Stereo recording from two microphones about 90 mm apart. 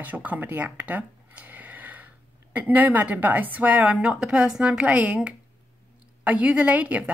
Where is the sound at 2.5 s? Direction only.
20° right (ahead or behind).